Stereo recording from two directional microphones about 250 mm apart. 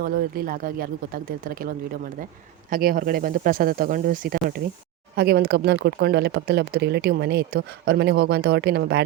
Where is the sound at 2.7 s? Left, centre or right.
Right.